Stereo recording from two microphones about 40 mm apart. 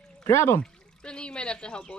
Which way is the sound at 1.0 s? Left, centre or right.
Left.